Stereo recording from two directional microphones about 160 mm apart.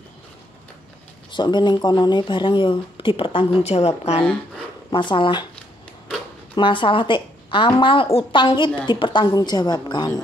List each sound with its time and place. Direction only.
1.3 s a woman's voice: 30° left (ahead or behind)
6.5 s a woman's voice: 30° left (ahead or behind)